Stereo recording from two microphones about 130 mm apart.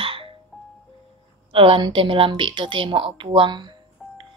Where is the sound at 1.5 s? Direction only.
45° right (ahead or behind).